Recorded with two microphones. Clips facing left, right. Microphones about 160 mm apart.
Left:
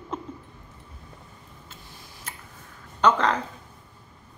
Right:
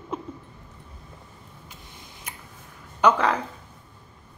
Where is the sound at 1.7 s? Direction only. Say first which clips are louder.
Right 1 dB; 15° right (ahead or behind).